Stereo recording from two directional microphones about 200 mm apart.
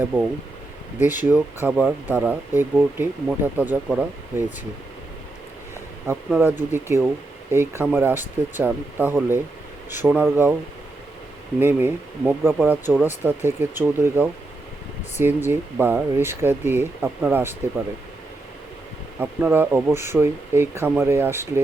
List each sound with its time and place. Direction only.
0.0 s speech: 5° right (ahead or behind)
6.1 s speech: 10° right (ahead or behind)
11.6 s speech: 10° right (ahead or behind)
15.4 s speech: 10° right (ahead or behind)
19.2 s speech: 10° right (ahead or behind)